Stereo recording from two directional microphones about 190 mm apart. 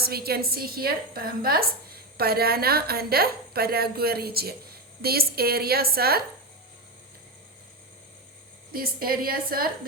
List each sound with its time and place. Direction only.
0.0 s a woman's voice: 55° right (ahead or behind)
8.7 s a woman's voice: 50° right (ahead or behind)